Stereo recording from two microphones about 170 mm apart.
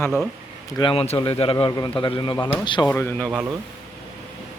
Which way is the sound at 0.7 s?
30° left (ahead or behind).